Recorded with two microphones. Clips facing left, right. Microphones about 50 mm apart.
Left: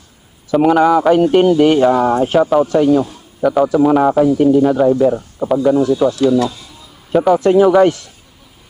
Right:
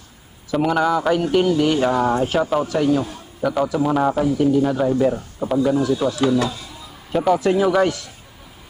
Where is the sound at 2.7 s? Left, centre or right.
Left.